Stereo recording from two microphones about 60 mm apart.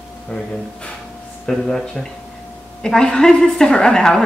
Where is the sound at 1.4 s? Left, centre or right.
Centre.